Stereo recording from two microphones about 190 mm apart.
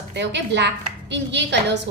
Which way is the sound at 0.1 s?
65° right (ahead or behind).